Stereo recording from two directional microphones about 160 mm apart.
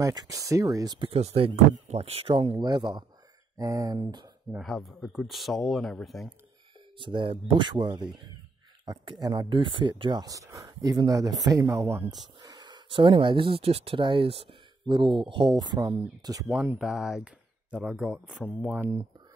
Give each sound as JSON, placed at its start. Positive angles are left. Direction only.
{"t": 0.0, "sound": "speech", "side_deg": -20}
{"t": 4.6, "sound": "speech", "side_deg": 0}
{"t": 7.0, "sound": "speech", "side_deg": -30}
{"t": 16.7, "sound": "speech", "side_deg": -5}